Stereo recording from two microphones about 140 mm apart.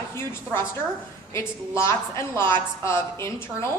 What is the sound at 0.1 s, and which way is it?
A woman's voice, 15° left (ahead or behind).